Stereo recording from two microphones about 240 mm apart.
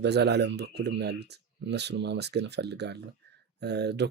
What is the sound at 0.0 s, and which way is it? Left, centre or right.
Speech, right.